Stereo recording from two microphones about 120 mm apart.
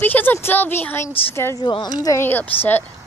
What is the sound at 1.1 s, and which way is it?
Speech, 50° left (ahead or behind).